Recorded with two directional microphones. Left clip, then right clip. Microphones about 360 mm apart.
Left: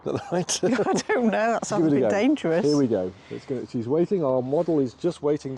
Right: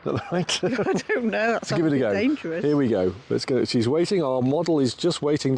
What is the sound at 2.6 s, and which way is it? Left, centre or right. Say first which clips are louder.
Speech: right 1 dB; right.